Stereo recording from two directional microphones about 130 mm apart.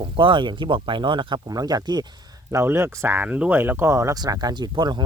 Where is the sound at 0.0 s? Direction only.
40° right (ahead or behind).